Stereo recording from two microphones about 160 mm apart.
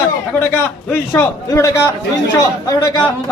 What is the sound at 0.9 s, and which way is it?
A man's voice, 15° left (ahead or behind).